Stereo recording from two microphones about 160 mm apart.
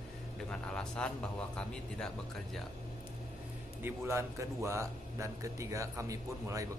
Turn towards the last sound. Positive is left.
turn(degrees=-20)  # may be behind; listen again after turning